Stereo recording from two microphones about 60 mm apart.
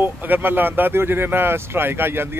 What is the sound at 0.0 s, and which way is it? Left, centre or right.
Speech, right.